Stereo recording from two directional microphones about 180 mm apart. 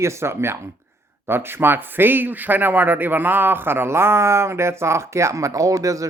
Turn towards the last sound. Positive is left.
turn(degrees=-20)  # may be behind; listen again after turning